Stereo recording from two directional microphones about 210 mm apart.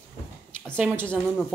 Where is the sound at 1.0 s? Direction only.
5° left (ahead or behind).